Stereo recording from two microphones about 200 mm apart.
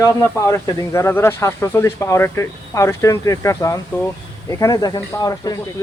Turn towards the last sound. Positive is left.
turn(degrees=15)  # may be behind; listen again after turning